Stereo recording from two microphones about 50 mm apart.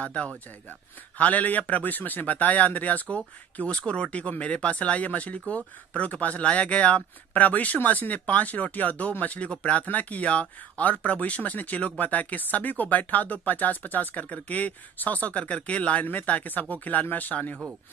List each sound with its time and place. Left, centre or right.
0.0 s speech: left